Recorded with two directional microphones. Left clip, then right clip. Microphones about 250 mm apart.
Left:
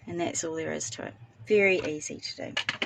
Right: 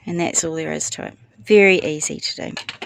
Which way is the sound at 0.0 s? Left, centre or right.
Right.